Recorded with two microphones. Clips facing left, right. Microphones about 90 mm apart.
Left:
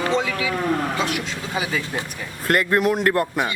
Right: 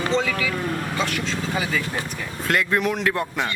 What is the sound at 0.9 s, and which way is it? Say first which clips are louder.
Speech: even; 15° left (ahead or behind).